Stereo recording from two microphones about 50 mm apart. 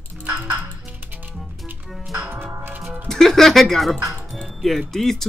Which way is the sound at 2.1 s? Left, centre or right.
Right.